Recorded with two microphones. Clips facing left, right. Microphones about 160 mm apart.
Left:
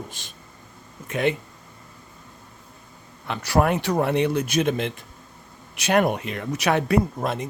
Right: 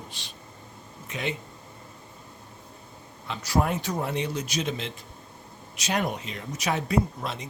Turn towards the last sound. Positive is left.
turn(degrees=55)  # may be behind; listen again after turning